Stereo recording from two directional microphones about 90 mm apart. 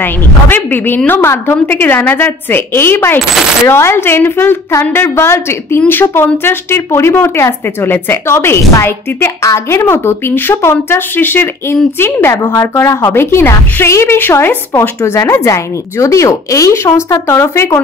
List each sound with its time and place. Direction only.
0.0 s a woman's voice: 20° left (ahead or behind)